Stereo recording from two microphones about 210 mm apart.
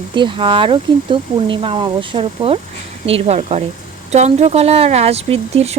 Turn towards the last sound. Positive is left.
turn(degrees=-30)  # may be behind; listen again after turning